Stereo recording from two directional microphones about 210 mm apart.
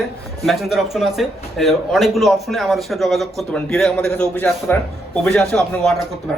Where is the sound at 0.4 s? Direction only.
Centre (ahead or behind).